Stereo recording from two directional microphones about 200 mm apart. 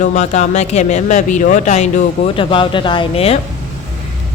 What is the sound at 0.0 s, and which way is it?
Speech, 40° left (ahead or behind).